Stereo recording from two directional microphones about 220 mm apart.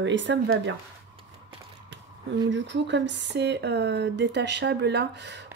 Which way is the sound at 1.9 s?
55° right (ahead or behind).